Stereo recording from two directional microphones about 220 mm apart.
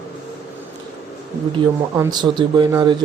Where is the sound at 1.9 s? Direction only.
15° right (ahead or behind).